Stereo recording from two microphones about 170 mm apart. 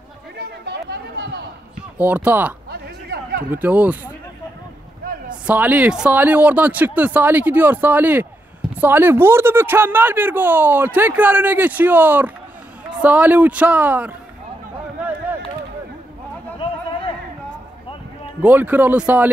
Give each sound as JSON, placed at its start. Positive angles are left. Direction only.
{"t": 0.4, "sound": "chatter", "side_deg": -80}
{"t": 2.0, "sound": "speech", "side_deg": -10}
{"t": 2.7, "sound": "a sound", "side_deg": -70}
{"t": 3.5, "sound": "speech", "side_deg": -10}
{"t": 5.5, "sound": "speech", "side_deg": -10}
{"t": 18.4, "sound": "speech", "side_deg": -10}